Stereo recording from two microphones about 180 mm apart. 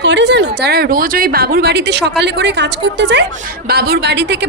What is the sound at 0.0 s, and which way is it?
A woman's voice, 75° right (ahead or behind).